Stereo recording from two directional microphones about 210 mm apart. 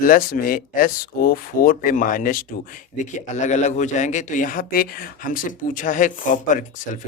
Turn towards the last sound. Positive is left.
turn(degrees=35)  # may be behind; listen again after turning